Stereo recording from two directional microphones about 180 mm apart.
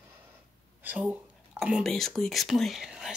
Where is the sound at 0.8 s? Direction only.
10° right (ahead or behind).